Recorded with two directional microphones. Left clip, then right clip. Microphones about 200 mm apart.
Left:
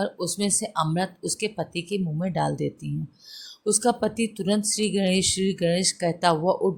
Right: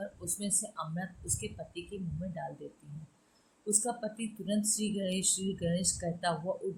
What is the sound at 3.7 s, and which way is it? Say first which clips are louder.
Speech: left 12 dB; 50° left (ahead or behind).